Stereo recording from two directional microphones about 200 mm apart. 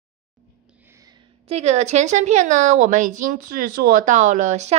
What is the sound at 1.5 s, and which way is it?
A woman's voice, 35° right (ahead or behind).